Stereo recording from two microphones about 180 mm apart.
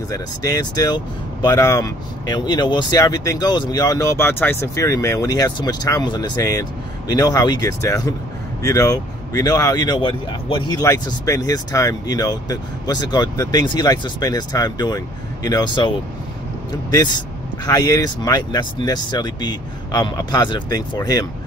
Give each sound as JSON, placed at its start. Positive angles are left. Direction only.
{"t": 0.1, "sound": "speech", "side_deg": 20}
{"t": 16.9, "sound": "speech", "side_deg": 20}